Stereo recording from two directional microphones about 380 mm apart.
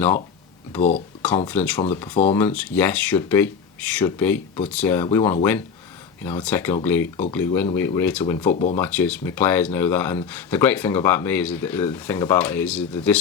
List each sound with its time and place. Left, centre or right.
1.5 s speech: centre
8.5 s speech: centre
8.8 s speech: centre